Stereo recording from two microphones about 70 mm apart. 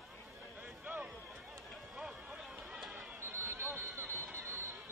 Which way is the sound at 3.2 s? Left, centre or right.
Right.